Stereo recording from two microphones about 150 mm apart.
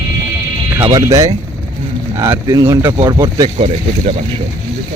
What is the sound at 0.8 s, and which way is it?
Speech, 25° right (ahead or behind).